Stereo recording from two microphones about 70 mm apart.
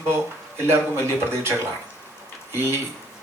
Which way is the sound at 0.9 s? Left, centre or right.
Right.